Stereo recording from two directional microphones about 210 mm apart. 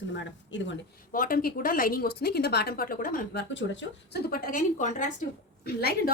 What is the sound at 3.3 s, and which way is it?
A woman's voice, 60° left (ahead or behind).